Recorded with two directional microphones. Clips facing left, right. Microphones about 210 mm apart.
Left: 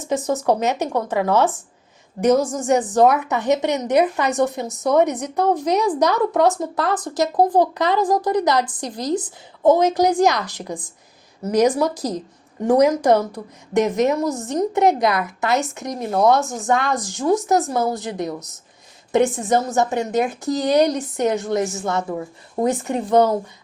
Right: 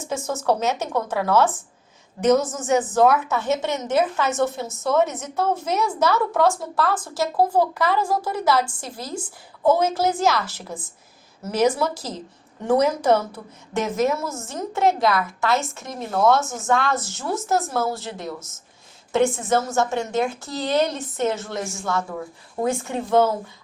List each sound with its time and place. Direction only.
0.1 s speech: 15° left (ahead or behind)
13.9 s a woman's voice: centre (ahead or behind)
14.2 s a woman's voice: 15° left (ahead or behind)